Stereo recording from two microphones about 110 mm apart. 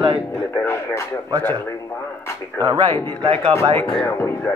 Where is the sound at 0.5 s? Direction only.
25° left (ahead or behind).